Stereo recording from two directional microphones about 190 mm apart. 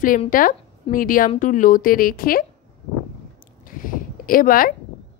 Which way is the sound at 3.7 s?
45° left (ahead or behind).